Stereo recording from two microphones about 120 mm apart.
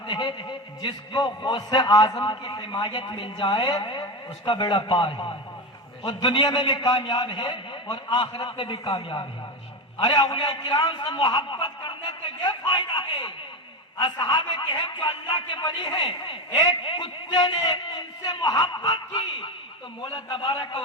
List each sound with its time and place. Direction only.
0.1 s a man's voice: 40° left (ahead or behind)